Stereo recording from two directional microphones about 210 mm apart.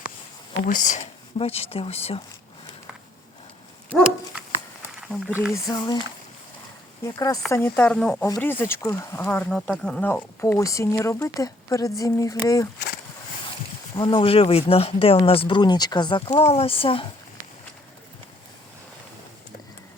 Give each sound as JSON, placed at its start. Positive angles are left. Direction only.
{"t": 0.5, "sound": "speech", "side_deg": 40}
{"t": 4.3, "sound": "a sound", "side_deg": -5}
{"t": 5.6, "sound": "speech", "side_deg": 20}
{"t": 7.0, "sound": "speech", "side_deg": 15}
{"t": 13.9, "sound": "speech", "side_deg": 20}